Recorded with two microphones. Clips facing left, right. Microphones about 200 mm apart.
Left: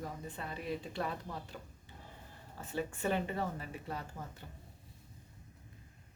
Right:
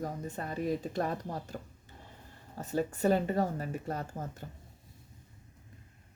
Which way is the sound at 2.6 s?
40° right (ahead or behind).